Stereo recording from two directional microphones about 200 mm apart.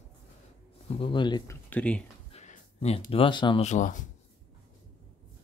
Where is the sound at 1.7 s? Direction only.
5° left (ahead or behind).